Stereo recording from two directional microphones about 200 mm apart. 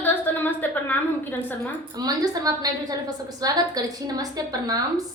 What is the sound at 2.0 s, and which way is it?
A woman's voice, 20° right (ahead or behind).